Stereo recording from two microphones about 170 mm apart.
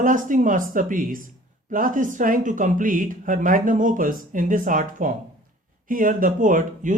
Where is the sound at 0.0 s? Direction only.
50° right (ahead or behind).